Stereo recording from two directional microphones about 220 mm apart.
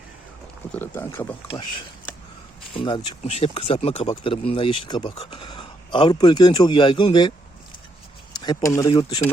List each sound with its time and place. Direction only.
0.7 s speech: 10° left (ahead or behind)
2.7 s speech: 20° left (ahead or behind)
8.4 s speech: 15° left (ahead or behind)